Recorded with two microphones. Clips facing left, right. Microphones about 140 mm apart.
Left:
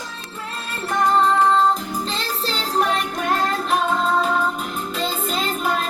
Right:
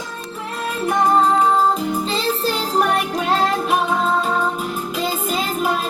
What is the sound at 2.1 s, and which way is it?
Music, 5° right (ahead or behind).